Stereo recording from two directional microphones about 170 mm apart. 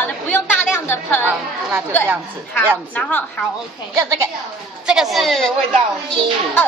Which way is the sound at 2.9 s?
10° left (ahead or behind).